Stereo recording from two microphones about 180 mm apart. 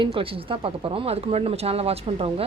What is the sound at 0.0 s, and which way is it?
Speech, 30° right (ahead or behind).